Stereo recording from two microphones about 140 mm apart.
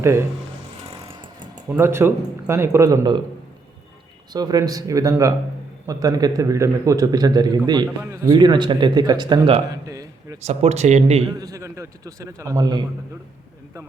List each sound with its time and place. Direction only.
0.0 s a man's voice: 20° right (ahead or behind)
1.0 s vehicle: 35° right (ahead or behind)
1.7 s speech: 15° right (ahead or behind)
4.3 s a man's voice: 30° right (ahead or behind)
8.4 s speech: 35° right (ahead or behind)
10.4 s speech: 50° right (ahead or behind)
11.3 s a man's voice: 25° right (ahead or behind)